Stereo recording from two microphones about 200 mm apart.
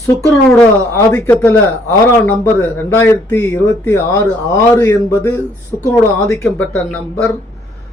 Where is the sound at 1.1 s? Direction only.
10° left (ahead or behind).